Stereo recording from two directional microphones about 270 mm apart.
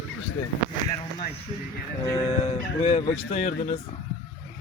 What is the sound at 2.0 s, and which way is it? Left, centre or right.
Fowl, centre.